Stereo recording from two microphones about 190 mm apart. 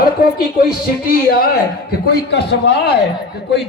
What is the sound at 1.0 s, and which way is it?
A man's voice, 50° left (ahead or behind).